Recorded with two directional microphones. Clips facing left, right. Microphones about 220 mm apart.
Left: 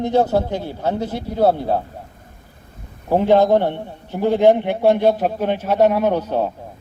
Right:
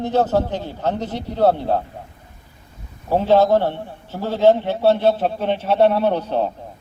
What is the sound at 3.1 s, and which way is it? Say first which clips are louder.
A man's voice: left 1 dB; 15° left (ahead or behind).